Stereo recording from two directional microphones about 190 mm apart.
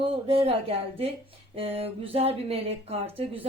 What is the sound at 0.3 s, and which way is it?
Speech, 30° right (ahead or behind).